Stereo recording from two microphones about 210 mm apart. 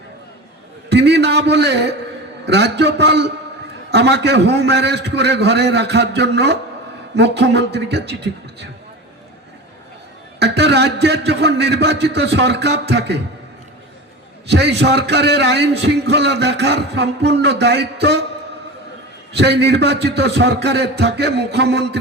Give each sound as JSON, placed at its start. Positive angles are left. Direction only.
{"t": 0.9, "sound": "a man's voice", "side_deg": -55}
{"t": 10.4, "sound": "a man's voice", "side_deg": -55}
{"t": 14.4, "sound": "a man's voice", "side_deg": -50}
{"t": 19.3, "sound": "a man's voice", "side_deg": -55}